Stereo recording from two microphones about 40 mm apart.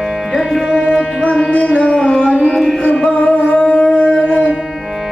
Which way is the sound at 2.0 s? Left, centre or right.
Left.